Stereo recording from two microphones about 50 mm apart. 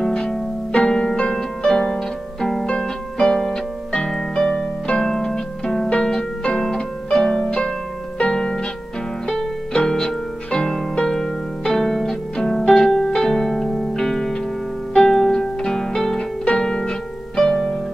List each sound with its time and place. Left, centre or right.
0.0 s harp: centre
2.8 s music: centre
5.9 s harp: centre
8.2 s music: centre
9.8 s music: centre
16.4 s pizzicato: centre
17.4 s music: centre